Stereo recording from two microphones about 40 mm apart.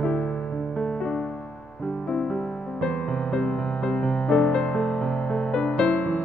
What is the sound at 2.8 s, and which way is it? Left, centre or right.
Music, left.